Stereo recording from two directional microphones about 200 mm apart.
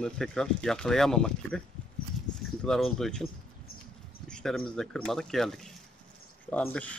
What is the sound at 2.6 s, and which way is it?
Speech, centre (ahead or behind).